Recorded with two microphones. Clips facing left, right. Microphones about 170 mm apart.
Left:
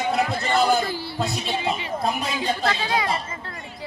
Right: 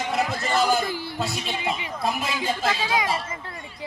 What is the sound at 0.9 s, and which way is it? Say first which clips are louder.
Music: left 1 dB; 15° right (ahead or behind).